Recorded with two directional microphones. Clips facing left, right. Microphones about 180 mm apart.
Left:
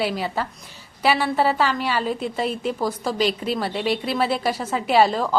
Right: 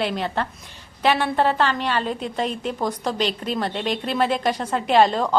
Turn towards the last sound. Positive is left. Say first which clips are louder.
# right 1 dB
turn(degrees=5)  # may be behind; listen again after turning